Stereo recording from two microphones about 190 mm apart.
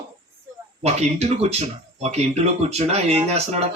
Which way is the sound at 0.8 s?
35° right (ahead or behind).